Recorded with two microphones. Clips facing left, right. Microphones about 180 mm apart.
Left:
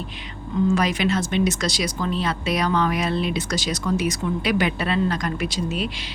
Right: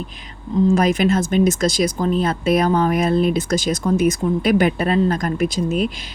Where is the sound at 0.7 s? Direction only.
50° right (ahead or behind).